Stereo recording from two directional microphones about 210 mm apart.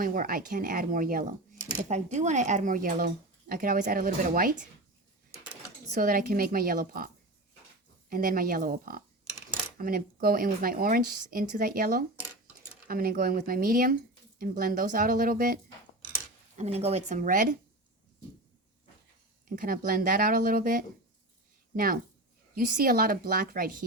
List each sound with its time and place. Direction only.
0.0 s speech: 40° right (ahead or behind)
5.9 s speech: 45° right (ahead or behind)
8.1 s speech: 45° right (ahead or behind)
16.6 s speech: 30° right (ahead or behind)
19.5 s speech: 40° right (ahead or behind)
22.5 s speech: 45° right (ahead or behind)